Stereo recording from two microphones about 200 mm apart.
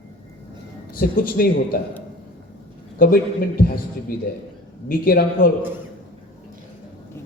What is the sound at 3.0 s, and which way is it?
Speech, 45° left (ahead or behind).